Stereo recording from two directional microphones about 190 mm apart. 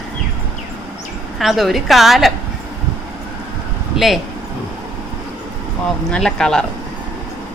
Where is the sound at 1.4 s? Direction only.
Centre (ahead or behind).